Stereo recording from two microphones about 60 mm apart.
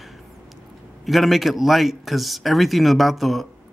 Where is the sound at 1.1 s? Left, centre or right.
Centre.